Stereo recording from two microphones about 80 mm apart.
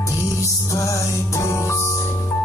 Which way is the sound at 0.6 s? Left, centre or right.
Left.